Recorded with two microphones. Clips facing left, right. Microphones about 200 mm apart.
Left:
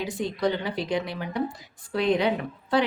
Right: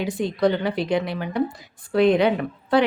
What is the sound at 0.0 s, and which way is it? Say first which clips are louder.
Speech: right 5 dB; 60° right (ahead or behind).